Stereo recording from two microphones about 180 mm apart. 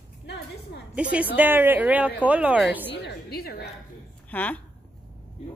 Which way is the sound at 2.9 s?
60° left (ahead or behind).